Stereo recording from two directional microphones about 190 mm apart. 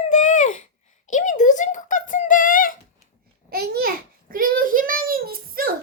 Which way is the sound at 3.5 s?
55° right (ahead or behind).